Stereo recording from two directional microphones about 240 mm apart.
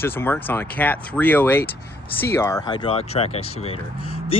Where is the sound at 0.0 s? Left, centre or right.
Centre.